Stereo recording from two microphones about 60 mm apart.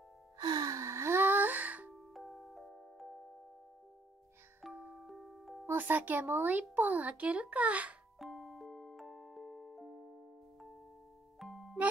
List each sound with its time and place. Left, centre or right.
0.5 s music: right
2.0 s music: centre
4.9 s music: centre
5.7 s speech: right
8.2 s music: centre